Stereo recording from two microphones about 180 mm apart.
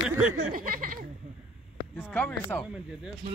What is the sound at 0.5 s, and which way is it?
Speech, 50° right (ahead or behind).